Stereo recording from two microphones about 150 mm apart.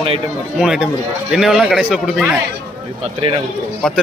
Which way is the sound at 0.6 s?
5° right (ahead or behind).